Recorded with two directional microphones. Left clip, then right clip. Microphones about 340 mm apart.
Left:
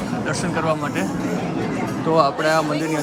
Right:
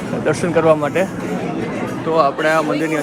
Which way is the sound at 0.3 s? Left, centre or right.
Centre.